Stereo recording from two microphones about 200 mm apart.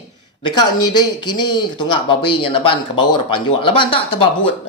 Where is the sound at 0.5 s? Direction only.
20° left (ahead or behind).